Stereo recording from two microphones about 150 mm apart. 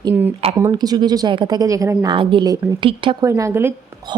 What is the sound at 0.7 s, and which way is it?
Speech, 25° right (ahead or behind).